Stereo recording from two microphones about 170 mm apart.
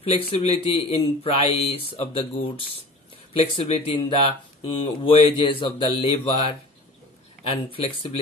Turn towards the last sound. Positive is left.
turn(degrees=35)  # may be behind; listen again after turning